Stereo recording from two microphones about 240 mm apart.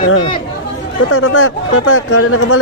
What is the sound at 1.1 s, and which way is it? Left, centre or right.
Speech, left.